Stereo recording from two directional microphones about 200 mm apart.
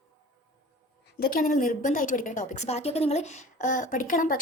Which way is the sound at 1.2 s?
45° left (ahead or behind).